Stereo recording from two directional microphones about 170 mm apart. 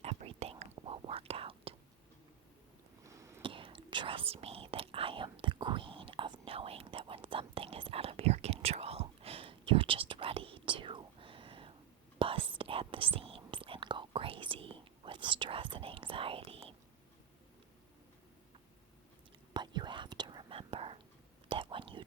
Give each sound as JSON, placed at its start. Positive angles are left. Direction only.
{"t": 0.0, "sound": "whispering", "side_deg": -35}
{"t": 3.0, "sound": "a sound", "side_deg": -20}
{"t": 3.4, "sound": "whispering", "side_deg": -30}
{"t": 19.5, "sound": "whispering", "side_deg": -25}